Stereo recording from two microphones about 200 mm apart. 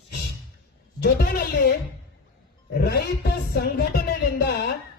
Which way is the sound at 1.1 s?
50° left (ahead or behind).